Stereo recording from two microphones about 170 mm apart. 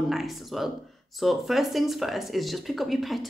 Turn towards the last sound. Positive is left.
turn(degrees=0)  # may be behind; listen again after turning